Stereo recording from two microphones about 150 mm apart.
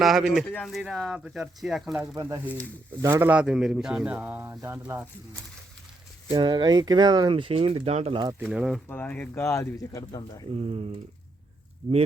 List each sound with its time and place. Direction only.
0.0 s speech: centre (ahead or behind)
2.0 s a man's voice: 20° right (ahead or behind)
6.3 s speech: 30° right (ahead or behind)
8.5 s speech: 5° right (ahead or behind)
8.9 s speech: 10° left (ahead or behind)
10.5 s speech: 45° right (ahead or behind)